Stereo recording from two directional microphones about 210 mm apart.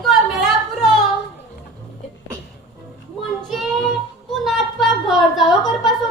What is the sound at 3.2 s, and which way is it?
A woman's voice, centre (ahead or behind).